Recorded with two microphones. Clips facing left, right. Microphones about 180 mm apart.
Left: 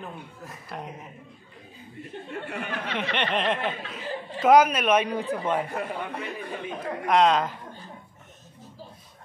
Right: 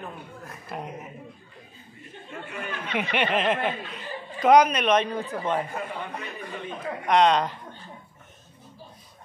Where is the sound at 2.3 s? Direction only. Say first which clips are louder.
Left 1 dB; 65° left (ahead or behind).